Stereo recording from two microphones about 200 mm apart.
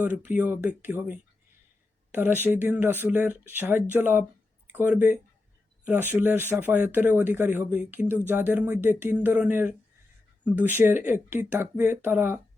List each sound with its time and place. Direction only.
0.0 s speech: 10° right (ahead or behind)